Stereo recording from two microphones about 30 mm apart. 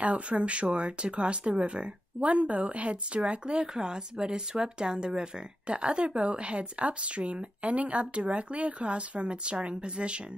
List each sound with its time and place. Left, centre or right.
0.3 s speech: right
2.2 s speech: right
3.7 s speech: right